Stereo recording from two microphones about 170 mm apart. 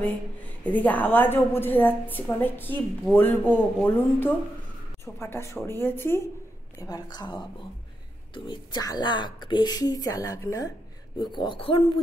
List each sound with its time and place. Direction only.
0.7 s a woman's voice: 10° left (ahead or behind); by 7.4 s 25° left (ahead or behind)
8.5 s speech: 25° left (ahead or behind)